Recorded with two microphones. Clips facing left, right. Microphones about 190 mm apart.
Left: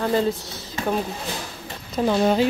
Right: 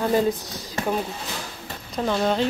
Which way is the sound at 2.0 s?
10° left (ahead or behind).